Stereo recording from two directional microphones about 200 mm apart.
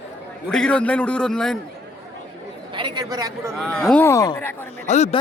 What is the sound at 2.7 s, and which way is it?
Speech, 25° right (ahead or behind).